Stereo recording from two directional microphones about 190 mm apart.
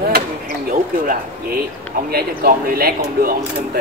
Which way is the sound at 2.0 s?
50° right (ahead or behind).